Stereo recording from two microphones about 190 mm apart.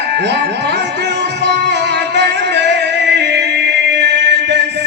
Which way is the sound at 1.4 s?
65° right (ahead or behind).